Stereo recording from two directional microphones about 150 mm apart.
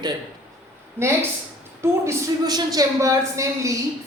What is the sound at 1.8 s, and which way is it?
Speech, 20° right (ahead or behind).